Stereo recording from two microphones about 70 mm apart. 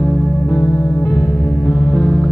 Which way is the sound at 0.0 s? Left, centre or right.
Centre.